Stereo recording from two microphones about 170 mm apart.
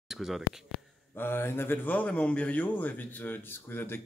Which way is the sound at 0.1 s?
Centre (ahead or behind).